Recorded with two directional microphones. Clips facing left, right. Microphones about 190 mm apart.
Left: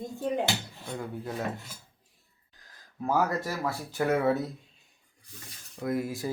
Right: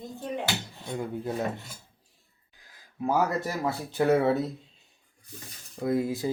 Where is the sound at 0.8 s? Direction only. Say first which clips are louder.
Right 4 dB; 15° right (ahead or behind).